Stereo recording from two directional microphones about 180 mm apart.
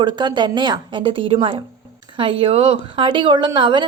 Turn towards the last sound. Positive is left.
turn(degrees=-25)  # may be behind; listen again after turning